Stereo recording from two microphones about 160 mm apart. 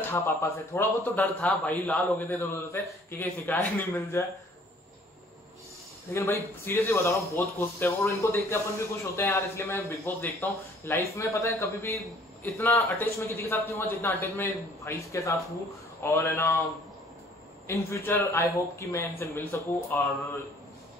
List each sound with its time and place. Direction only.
0.1 s speech: 15° left (ahead or behind)
6.1 s speech: 15° left (ahead or behind)
17.6 s speech: 15° left (ahead or behind)